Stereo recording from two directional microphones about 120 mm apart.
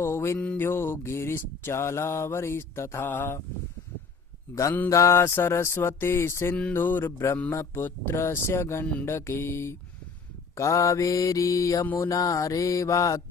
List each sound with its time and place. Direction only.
0.0 s mantra: 20° left (ahead or behind)
4.8 s mantra: 25° left (ahead or behind)
6.6 s a sound: 15° left (ahead or behind)
7.5 s mantra: 20° left (ahead or behind)